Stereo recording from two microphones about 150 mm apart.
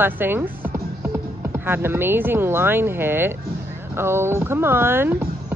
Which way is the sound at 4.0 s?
15° right (ahead or behind).